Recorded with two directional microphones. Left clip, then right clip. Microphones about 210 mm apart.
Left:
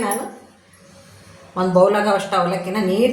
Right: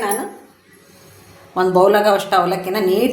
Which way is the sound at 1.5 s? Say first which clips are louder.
Right 2 dB; 45° right (ahead or behind).